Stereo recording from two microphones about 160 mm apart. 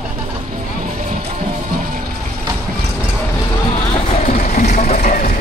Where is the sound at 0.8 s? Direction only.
50° right (ahead or behind).